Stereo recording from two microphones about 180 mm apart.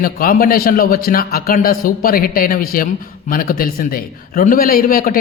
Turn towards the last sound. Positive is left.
turn(degrees=50)  # may be behind; listen again after turning